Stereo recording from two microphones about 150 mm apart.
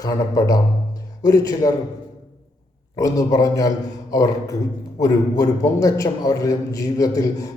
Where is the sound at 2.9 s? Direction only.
25° left (ahead or behind).